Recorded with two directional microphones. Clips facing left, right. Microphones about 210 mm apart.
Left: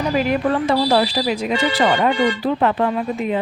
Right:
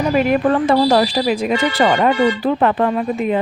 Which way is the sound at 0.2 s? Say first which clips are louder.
Right 4 dB; 55° right (ahead or behind).